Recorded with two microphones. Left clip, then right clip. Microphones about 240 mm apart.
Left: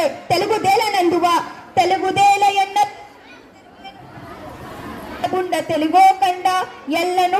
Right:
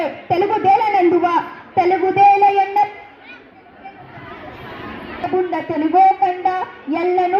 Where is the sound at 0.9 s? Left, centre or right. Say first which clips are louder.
Right 1 dB; left.